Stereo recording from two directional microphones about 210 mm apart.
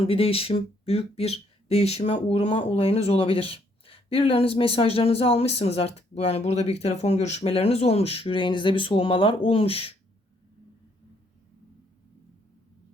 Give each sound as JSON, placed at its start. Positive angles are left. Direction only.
{"t": 0.0, "sound": "speech", "side_deg": 25}